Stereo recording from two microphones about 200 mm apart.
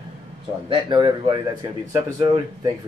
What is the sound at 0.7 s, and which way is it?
Speech, 20° right (ahead or behind).